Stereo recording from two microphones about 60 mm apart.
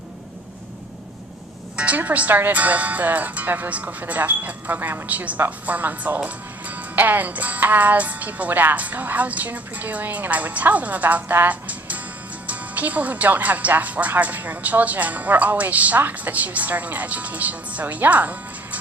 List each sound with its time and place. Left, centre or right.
1.7 s speech: right